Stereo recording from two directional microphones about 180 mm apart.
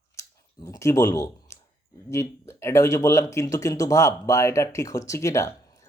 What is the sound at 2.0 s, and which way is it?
Speech, 15° left (ahead or behind).